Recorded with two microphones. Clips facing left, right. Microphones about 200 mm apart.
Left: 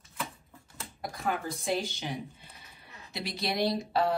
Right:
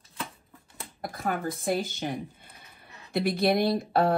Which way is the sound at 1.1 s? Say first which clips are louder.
Right 3 dB; 50° right (ahead or behind).